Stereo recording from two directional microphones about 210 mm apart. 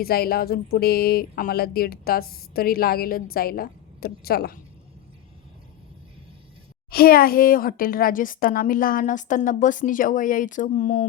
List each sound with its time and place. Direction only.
0.0 s speech: 45° left (ahead or behind)
6.9 s a woman's voice: 45° left (ahead or behind)